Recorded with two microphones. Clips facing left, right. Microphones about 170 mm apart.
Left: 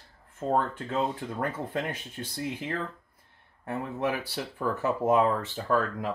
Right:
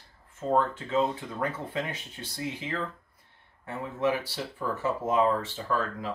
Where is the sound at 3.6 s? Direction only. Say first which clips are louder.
Right 1 dB; 55° left (ahead or behind).